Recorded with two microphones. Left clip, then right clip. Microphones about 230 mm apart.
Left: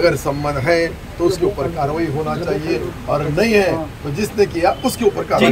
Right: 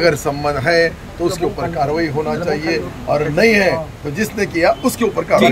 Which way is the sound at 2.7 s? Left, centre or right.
Centre.